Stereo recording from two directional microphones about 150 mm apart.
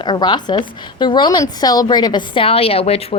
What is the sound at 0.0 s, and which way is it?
A woman's voice, 30° left (ahead or behind).